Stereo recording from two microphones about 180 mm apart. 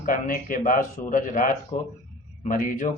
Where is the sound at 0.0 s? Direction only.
50° left (ahead or behind).